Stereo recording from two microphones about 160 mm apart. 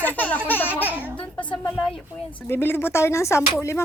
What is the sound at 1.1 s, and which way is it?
Speech, 5° left (ahead or behind).